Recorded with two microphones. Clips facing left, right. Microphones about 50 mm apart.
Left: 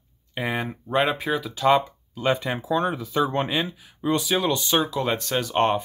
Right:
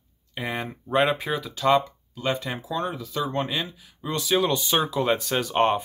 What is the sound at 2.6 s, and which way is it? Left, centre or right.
Speech, left.